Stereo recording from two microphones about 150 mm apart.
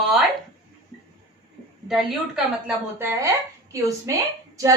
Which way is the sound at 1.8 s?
Centre (ahead or behind).